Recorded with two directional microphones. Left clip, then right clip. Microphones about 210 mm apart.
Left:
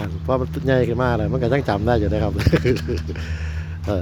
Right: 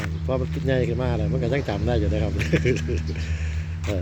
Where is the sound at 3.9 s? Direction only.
5° left (ahead or behind).